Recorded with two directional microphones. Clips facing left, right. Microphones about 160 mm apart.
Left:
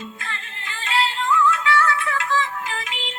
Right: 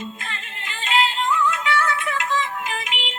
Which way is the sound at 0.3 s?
20° right (ahead or behind).